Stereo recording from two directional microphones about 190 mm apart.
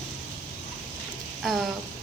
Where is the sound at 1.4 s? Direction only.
Centre (ahead or behind).